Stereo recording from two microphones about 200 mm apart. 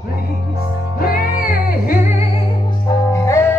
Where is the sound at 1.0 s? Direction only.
45° left (ahead or behind).